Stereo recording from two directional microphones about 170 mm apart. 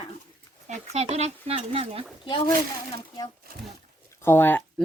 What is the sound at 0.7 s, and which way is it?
Speech, 40° right (ahead or behind).